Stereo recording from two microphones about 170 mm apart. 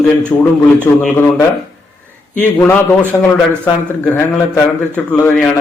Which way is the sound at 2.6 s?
10° left (ahead or behind).